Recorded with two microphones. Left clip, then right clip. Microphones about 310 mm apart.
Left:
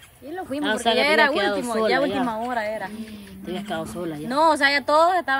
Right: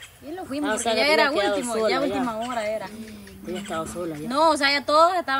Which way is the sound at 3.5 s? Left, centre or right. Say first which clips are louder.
Left 1 dB; left.